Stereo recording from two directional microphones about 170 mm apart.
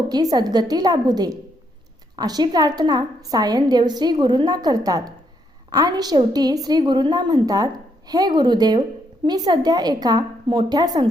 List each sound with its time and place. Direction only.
0.1 s a woman's voice: 25° right (ahead or behind)